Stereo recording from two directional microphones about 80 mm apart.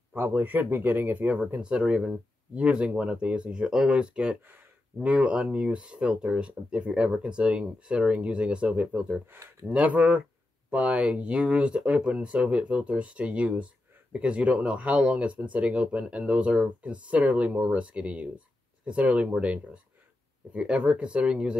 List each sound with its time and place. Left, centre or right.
0.1 s speech: right
1.6 s speech: centre